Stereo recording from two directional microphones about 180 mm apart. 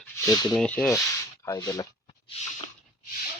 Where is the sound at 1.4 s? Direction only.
20° left (ahead or behind).